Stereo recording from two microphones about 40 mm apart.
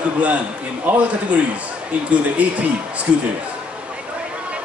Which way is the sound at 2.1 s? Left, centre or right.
Right.